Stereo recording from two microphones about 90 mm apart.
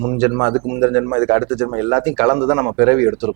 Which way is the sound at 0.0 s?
20° right (ahead or behind).